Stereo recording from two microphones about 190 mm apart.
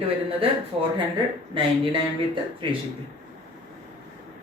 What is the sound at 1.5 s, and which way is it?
Speech, 25° right (ahead or behind).